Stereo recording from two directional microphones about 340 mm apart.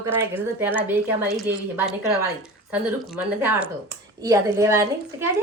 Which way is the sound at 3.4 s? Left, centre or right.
Centre.